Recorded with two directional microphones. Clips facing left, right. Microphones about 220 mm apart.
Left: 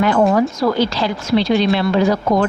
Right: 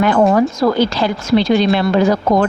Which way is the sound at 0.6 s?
50° right (ahead or behind).